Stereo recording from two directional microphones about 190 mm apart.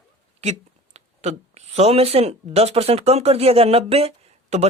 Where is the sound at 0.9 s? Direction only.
35° right (ahead or behind).